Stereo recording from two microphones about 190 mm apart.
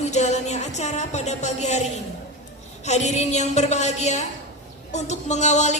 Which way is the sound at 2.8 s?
35° left (ahead or behind).